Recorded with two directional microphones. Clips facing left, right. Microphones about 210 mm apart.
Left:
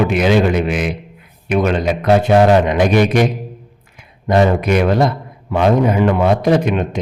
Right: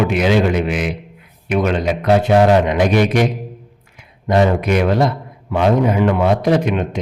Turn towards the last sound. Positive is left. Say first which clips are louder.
# left 1 dB
turn(degrees=45)  # may be behind; listen again after turning